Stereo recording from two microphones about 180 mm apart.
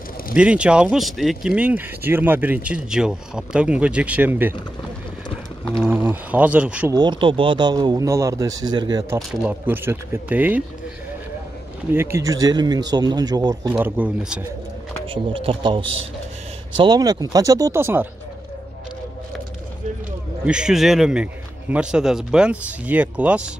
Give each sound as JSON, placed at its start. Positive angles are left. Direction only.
{"t": 0.4, "sound": "speech", "side_deg": -5}
{"t": 5.9, "sound": "speech", "side_deg": -10}
{"t": 6.9, "sound": "speech", "side_deg": -25}
{"t": 9.4, "sound": "speech", "side_deg": -10}
{"t": 11.9, "sound": "speech", "side_deg": -15}
{"t": 13.7, "sound": "speech", "side_deg": -10}
{"t": 15.0, "sound": "speech", "side_deg": -30}
{"t": 20.4, "sound": "speech", "side_deg": -5}